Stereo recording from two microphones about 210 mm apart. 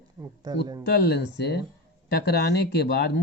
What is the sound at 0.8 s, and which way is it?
Speech, 55° left (ahead or behind).